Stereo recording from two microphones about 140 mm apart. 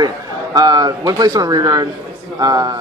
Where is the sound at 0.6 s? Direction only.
30° right (ahead or behind).